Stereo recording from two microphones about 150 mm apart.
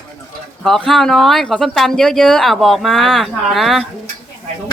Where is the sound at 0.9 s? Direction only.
Centre (ahead or behind).